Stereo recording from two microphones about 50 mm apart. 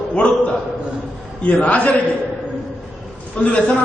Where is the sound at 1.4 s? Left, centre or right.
Left.